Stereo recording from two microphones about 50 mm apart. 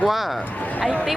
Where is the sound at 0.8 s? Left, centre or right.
Centre.